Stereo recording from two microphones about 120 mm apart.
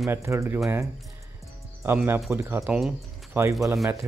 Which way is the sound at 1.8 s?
20° right (ahead or behind).